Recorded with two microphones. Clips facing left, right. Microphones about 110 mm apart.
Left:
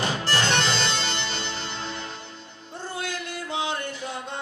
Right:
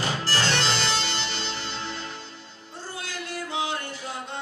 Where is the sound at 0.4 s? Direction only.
20° left (ahead or behind).